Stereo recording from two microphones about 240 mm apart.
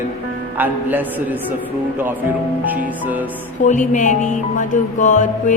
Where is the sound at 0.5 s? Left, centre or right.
Centre.